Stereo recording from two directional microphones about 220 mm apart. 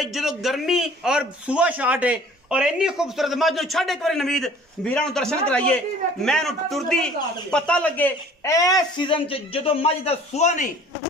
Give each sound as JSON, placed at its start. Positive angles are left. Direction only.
{"t": 0.0, "sound": "a man's voice", "side_deg": 0}